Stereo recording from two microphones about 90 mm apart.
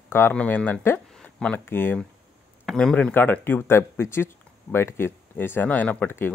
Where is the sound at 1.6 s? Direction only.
25° left (ahead or behind).